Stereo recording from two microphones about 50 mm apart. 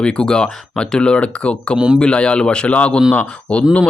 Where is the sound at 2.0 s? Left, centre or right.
Centre.